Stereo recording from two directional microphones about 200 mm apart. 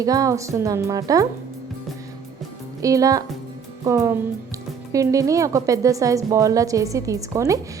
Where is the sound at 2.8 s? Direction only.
15° right (ahead or behind).